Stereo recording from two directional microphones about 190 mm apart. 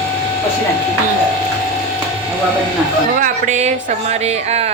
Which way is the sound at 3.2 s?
40° right (ahead or behind).